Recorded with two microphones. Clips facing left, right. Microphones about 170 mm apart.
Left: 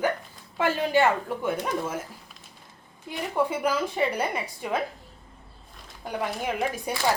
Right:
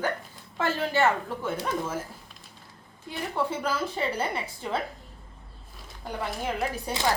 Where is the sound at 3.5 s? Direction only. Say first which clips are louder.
Left 3 dB; 10° left (ahead or behind).